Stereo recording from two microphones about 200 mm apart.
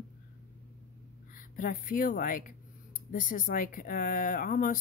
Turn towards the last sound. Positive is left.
turn(degrees=40)  # may be behind; listen again after turning